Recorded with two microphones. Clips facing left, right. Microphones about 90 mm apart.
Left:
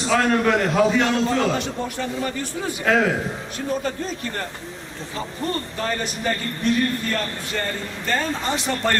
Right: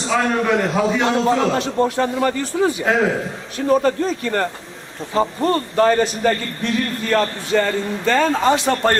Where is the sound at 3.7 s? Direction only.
70° right (ahead or behind).